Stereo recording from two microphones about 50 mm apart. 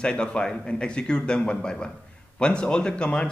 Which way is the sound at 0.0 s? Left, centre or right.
Centre.